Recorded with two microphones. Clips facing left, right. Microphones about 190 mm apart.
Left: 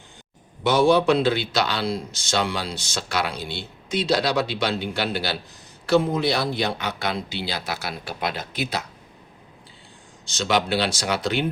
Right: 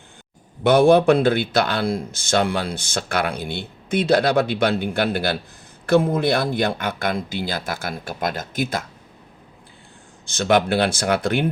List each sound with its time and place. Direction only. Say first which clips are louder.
0.6 s speech: right 4 dB; 55° right (ahead or behind)
10.2 s speech: right 5 dB; 55° right (ahead or behind)